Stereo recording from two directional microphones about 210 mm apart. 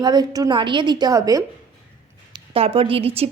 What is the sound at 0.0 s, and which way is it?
Speech, 20° right (ahead or behind).